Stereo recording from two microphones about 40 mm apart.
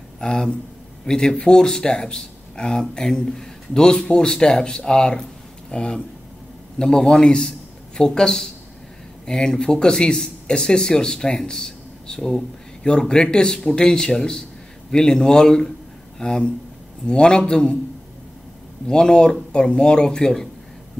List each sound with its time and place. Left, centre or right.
0.2 s speech: centre
18.9 s speech: left